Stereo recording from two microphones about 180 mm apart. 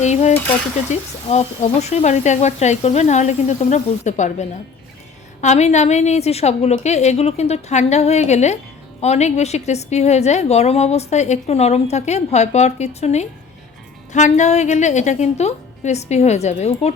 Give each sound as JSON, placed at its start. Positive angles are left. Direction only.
{"t": 0.0, "sound": "a woman's voice", "side_deg": 40}